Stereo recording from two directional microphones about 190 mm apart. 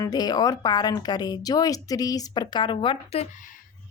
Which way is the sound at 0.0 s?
20° left (ahead or behind).